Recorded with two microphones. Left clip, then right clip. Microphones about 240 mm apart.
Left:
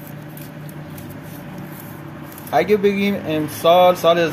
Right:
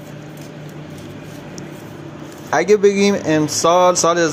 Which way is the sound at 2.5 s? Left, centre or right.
Right.